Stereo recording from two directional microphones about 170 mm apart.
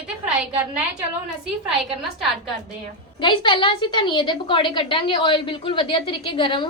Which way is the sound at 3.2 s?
30° left (ahead or behind).